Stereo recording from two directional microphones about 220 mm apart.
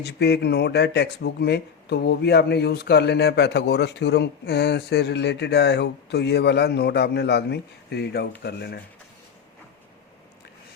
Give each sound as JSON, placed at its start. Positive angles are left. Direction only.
{"t": 0.0, "sound": "speech", "side_deg": 50}